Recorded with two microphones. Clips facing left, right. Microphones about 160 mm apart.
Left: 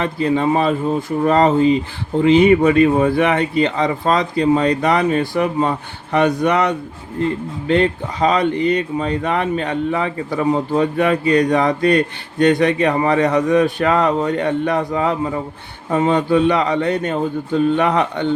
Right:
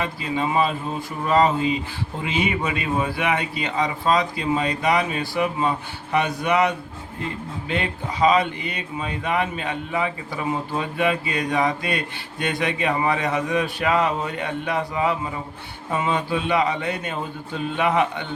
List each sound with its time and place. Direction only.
0.2 s speech: 50° left (ahead or behind)
8.2 s speech: 50° left (ahead or behind)